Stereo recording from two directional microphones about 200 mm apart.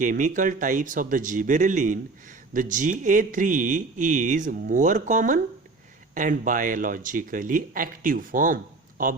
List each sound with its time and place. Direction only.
0.0 s a man's voice: 40° right (ahead or behind)